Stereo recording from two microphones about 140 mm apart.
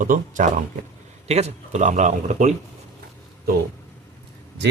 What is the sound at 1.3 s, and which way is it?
Speech, 50° right (ahead or behind).